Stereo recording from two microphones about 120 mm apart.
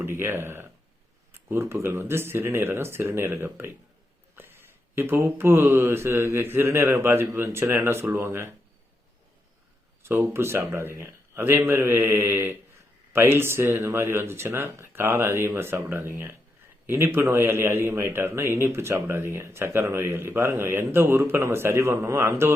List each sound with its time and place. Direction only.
0.0 s a man's voice: 20° right (ahead or behind)
10.0 s a man's voice: 20° right (ahead or behind)